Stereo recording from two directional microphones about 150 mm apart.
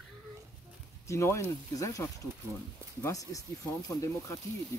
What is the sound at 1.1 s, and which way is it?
Speech, 20° left (ahead or behind).